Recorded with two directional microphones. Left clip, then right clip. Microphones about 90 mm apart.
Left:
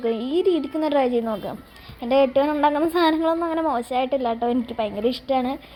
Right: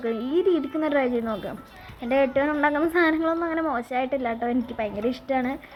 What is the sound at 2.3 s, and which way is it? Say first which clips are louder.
A woman's voice: left 3 dB; 45° left (ahead or behind).